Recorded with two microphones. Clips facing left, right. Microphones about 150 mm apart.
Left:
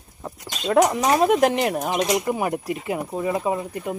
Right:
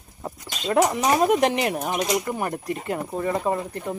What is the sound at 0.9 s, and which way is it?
Speech, centre (ahead or behind).